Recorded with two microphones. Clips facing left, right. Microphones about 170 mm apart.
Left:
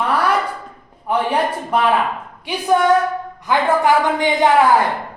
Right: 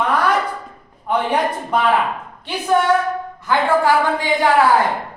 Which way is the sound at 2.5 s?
10° left (ahead or behind).